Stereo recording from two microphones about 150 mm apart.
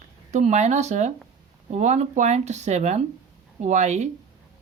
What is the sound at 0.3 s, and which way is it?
Speech, 50° right (ahead or behind).